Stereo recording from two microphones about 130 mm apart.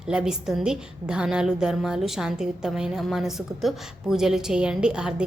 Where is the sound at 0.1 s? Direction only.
5° right (ahead or behind).